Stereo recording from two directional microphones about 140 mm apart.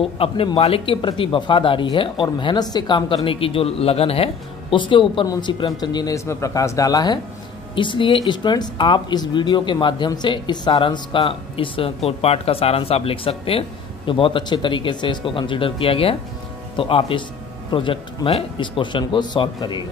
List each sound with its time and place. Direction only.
0.0 s a man's voice: 40° left (ahead or behind)